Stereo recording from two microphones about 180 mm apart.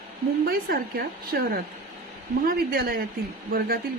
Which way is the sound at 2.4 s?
55° right (ahead or behind).